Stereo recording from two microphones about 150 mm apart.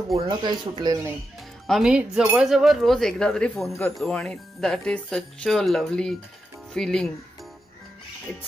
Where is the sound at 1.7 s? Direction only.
5° right (ahead or behind).